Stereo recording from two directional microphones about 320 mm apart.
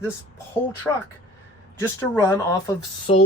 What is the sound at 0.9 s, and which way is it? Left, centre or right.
Speech, centre.